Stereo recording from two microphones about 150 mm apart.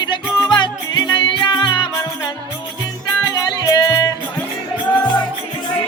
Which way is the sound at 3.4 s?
25° left (ahead or behind).